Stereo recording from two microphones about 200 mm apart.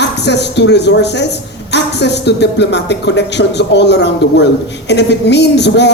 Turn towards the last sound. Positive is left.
turn(degrees=60)  # may be behind; listen again after turning